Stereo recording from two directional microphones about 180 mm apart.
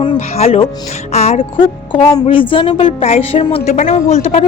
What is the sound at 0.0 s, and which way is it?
A woman's voice, 30° left (ahead or behind).